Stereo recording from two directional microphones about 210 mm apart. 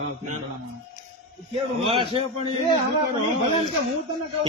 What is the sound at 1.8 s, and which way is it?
Speech, 25° right (ahead or behind).